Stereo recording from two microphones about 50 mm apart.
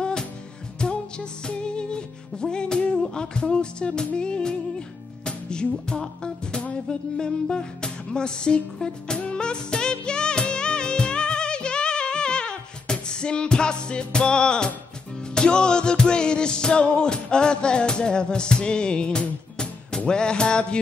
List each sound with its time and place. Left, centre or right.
0.0 s music: centre